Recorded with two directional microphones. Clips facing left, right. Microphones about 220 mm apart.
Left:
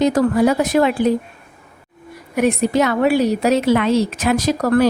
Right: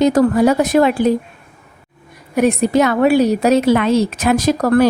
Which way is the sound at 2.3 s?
40° right (ahead or behind).